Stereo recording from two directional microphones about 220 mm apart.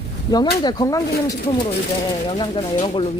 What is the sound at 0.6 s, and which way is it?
Speech, 20° left (ahead or behind).